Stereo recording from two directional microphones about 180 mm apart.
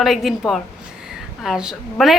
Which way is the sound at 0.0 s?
Centre (ahead or behind).